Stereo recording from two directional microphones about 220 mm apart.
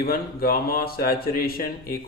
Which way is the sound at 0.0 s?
45° left (ahead or behind).